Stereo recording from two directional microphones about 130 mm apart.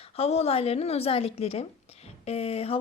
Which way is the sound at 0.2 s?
55° left (ahead or behind).